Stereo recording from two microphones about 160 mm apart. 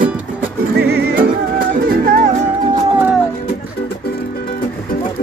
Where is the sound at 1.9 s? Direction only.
65° right (ahead or behind).